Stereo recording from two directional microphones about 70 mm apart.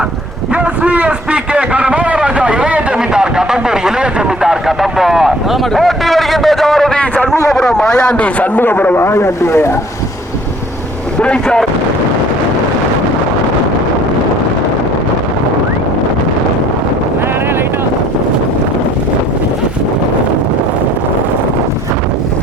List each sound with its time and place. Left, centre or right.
0.5 s a man's voice: centre; by 9.6 s left
11.2 s a man's voice: centre